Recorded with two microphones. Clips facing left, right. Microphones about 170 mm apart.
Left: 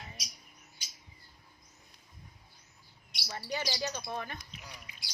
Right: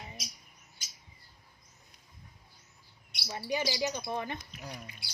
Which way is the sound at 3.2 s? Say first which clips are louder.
Right 4 dB; 10° right (ahead or behind).